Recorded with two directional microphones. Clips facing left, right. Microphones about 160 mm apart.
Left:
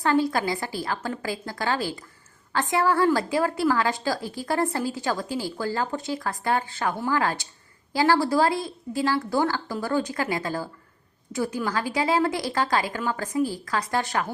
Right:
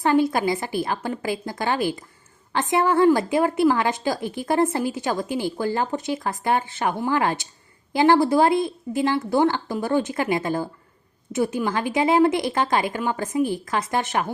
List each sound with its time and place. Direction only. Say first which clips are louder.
0.0 s a woman's voice: right 3 dB; 20° right (ahead or behind)